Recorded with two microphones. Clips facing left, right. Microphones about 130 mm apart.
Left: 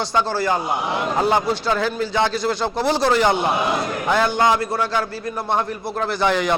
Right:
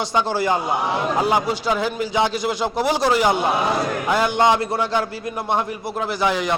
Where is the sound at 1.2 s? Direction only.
10° right (ahead or behind).